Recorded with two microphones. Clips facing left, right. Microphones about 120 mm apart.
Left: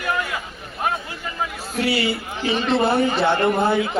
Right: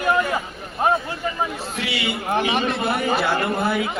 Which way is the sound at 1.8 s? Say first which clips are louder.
Left 7 dB; 40° left (ahead or behind).